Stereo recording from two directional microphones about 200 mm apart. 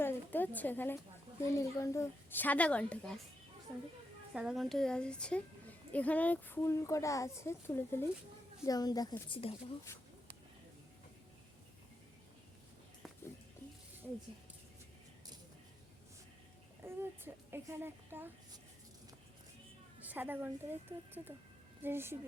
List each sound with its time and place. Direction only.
0.0 s a sound: 10° left (ahead or behind)
1.5 s a woman's voice: 15° left (ahead or behind)
4.4 s a woman's voice: centre (ahead or behind); by 9.7 s 30° left (ahead or behind)
16.8 s a woman's voice: 10° right (ahead or behind)
20.1 s a woman's voice: 10° right (ahead or behind)